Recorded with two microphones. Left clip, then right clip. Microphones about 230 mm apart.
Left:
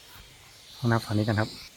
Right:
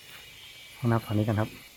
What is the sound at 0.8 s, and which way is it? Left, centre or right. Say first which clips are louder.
Speech: left 1 dB; centre.